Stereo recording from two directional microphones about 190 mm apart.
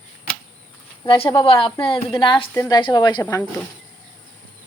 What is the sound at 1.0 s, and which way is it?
A woman's voice, 25° left (ahead or behind).